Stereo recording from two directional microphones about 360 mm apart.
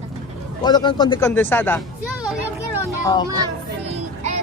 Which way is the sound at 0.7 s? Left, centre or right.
Centre.